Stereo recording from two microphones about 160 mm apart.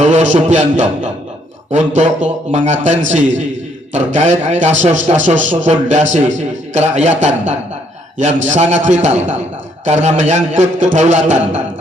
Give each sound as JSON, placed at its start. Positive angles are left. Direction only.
{"t": 0.0, "sound": "a man's voice", "side_deg": -45}